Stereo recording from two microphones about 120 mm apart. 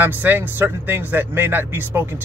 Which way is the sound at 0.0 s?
15° right (ahead or behind).